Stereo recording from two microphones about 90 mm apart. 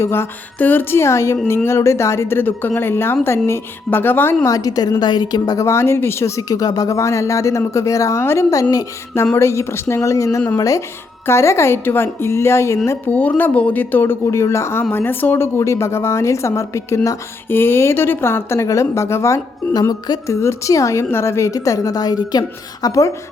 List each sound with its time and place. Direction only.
0.0 s speech: 25° left (ahead or behind)
4.4 s a woman's voice: 40° left (ahead or behind)
5.6 s speech: 30° left (ahead or behind)
13.1 s speech: 20° left (ahead or behind); by 22.9 s 45° left (ahead or behind)
22.9 s speech: 35° left (ahead or behind)